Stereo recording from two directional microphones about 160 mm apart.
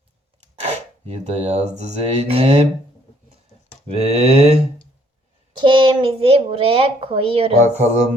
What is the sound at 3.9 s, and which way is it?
Speech, 40° right (ahead or behind).